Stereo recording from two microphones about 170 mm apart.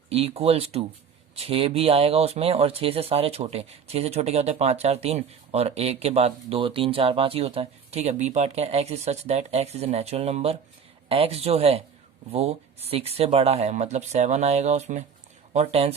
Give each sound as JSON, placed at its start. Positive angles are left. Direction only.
{"t": 0.1, "sound": "speech", "side_deg": -35}